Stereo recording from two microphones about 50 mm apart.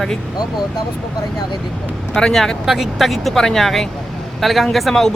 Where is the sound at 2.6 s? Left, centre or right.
Centre.